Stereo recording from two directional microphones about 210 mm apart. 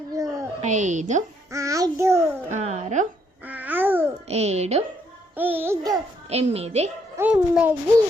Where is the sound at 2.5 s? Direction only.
30° right (ahead or behind).